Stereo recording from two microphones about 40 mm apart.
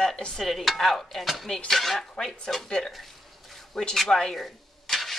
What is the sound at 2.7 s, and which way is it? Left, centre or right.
Speech, centre.